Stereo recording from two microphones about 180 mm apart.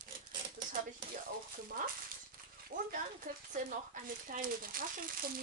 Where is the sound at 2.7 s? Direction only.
45° right (ahead or behind).